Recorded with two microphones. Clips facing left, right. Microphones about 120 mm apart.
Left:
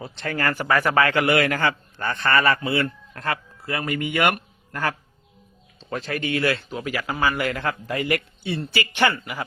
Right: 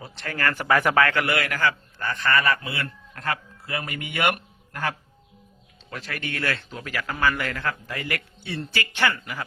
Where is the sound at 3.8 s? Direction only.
45° left (ahead or behind).